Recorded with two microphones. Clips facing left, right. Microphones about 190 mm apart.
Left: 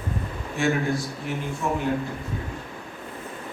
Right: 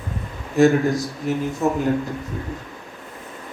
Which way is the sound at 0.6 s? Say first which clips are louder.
Right 8 dB; 40° right (ahead or behind).